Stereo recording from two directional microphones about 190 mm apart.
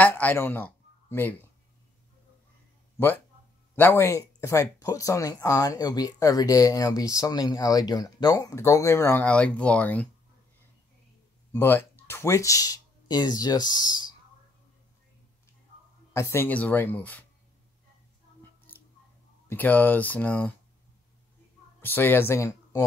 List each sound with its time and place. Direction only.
0.0 s a man's voice: 10° left (ahead or behind)
3.0 s speech: 10° left (ahead or behind)
11.5 s speech: 10° left (ahead or behind)
16.1 s speech: 15° left (ahead or behind)
19.5 s speech: 10° left (ahead or behind)
21.8 s speech: 10° left (ahead or behind)